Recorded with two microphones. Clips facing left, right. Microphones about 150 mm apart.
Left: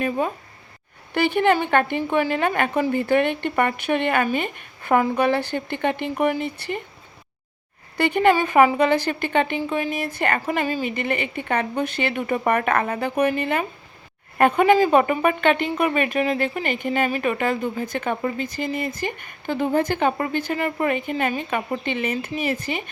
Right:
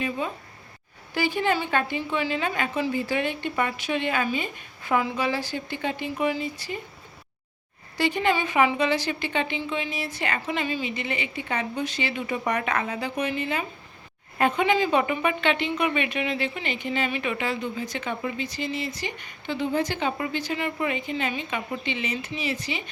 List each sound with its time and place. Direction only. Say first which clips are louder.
0.0 s speech: left 5 dB; 50° left (ahead or behind)
1.1 s a woman's voice: left 6 dB; 60° left (ahead or behind)
7.9 s speech: left 6 dB; 55° left (ahead or behind)